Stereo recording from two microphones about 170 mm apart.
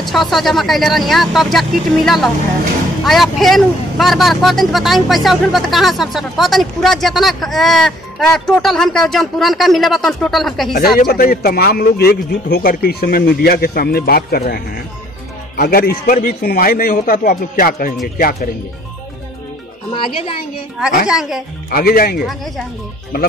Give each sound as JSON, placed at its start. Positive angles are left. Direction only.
{"t": 0.0, "sound": "speech", "side_deg": 0}
{"t": 10.7, "sound": "a man's voice", "side_deg": 65}
{"t": 21.1, "sound": "speech", "side_deg": 0}
{"t": 21.6, "sound": "a man's voice", "side_deg": 60}
{"t": 22.2, "sound": "speech", "side_deg": 0}